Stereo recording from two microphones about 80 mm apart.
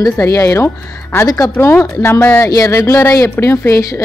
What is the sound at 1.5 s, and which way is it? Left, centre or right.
Speech, left.